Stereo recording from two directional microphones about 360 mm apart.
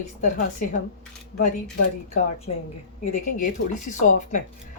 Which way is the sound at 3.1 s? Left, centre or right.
Left.